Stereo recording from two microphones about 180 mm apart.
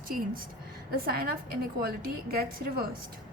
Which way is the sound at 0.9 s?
55° right (ahead or behind).